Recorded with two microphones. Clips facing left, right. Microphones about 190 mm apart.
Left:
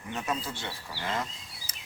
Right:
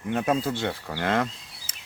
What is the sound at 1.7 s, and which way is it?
Bird vocalization, 90° right.